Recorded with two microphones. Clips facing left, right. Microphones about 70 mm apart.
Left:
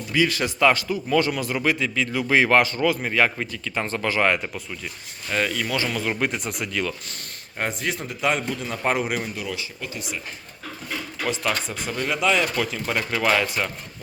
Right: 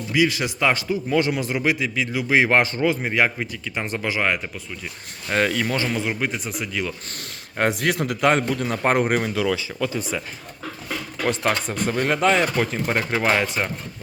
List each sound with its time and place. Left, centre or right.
0.1 s speech: centre
5.3 s a man's voice: right
5.7 s speech: right
6.1 s speech: centre
7.8 s a man's voice: right
11.2 s speech: right